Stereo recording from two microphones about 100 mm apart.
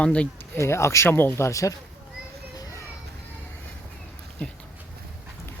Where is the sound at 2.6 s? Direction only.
40° left (ahead or behind).